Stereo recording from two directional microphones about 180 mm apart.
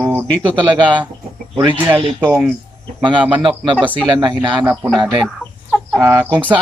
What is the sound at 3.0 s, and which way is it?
Speech, 25° right (ahead or behind).